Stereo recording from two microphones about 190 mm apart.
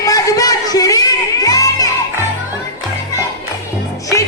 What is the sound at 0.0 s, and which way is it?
Music, 20° left (ahead or behind).